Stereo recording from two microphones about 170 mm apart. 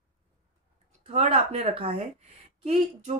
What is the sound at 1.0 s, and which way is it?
Speech, 40° right (ahead or behind).